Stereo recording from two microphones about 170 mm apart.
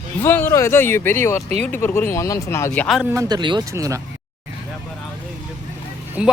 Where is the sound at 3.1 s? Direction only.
20° right (ahead or behind).